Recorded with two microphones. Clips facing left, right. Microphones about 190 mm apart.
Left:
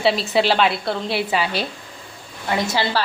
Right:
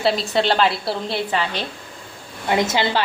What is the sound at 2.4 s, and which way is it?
Speech, 20° right (ahead or behind).